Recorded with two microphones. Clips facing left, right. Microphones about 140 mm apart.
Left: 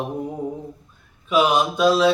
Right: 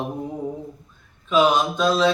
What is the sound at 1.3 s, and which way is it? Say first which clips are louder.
Mantra: even; 10° left (ahead or behind).